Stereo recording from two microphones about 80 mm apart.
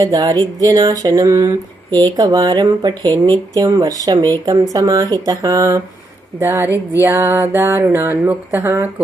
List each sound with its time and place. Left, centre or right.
0.0 s speech: right
1.9 s speech: right
6.4 s speech: right
8.5 s speech: right